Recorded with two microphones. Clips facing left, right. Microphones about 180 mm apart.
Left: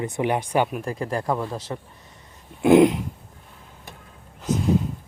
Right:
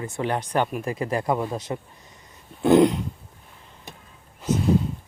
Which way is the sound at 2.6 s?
5° left (ahead or behind).